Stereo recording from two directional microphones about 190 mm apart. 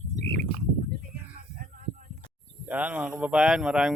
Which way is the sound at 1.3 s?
50° right (ahead or behind).